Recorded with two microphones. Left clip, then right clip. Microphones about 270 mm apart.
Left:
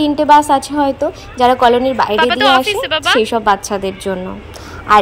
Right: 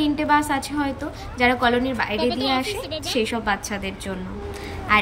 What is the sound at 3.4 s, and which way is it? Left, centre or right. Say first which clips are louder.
Speech: left 11 dB; left.